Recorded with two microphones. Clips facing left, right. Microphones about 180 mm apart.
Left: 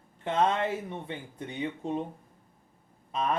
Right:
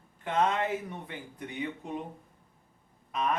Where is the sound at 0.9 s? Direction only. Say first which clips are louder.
Left 3 dB; 25° left (ahead or behind).